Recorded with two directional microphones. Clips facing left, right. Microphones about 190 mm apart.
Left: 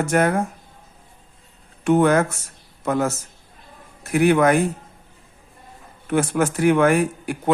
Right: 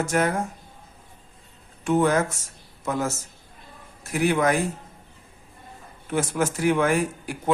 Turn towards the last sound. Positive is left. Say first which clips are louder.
# left 4 dB
turn(degrees=60)  # may be behind; listen again after turning